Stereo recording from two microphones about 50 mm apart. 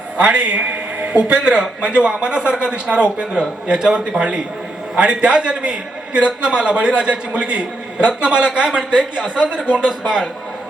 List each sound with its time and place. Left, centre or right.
0.2 s a man's voice: right